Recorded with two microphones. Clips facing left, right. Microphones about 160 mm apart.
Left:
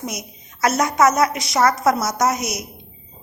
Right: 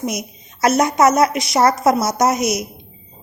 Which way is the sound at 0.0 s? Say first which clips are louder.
Right 6 dB; 15° right (ahead or behind).